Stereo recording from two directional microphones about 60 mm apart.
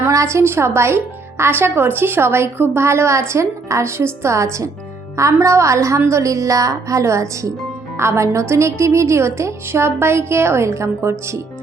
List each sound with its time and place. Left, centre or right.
0.1 s a woman's voice: right
7.9 s a woman's voice: right